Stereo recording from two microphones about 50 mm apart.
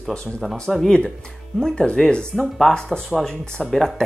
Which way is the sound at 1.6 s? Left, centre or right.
Centre.